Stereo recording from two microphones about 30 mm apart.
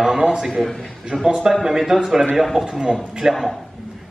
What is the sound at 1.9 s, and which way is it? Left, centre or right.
Speech, right.